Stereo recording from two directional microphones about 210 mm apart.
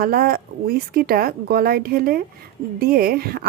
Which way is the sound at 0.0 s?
45° right (ahead or behind).